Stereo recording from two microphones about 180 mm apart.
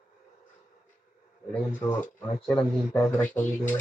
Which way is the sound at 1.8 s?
10° left (ahead or behind).